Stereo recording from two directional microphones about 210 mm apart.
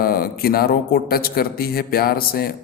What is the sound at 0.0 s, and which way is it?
Speech, 45° left (ahead or behind).